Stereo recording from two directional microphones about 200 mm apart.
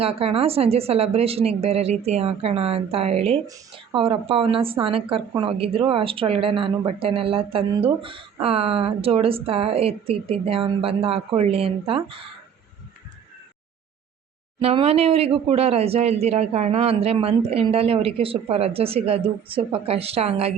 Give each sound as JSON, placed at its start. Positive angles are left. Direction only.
{"t": 0.0, "sound": "a woman's voice", "side_deg": -30}
{"t": 14.6, "sound": "speech", "side_deg": -30}